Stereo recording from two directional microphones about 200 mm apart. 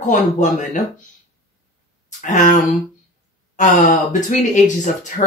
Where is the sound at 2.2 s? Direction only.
40° left (ahead or behind).